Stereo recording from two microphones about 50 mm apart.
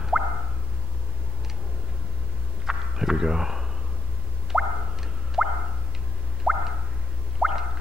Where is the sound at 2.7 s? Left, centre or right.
Centre.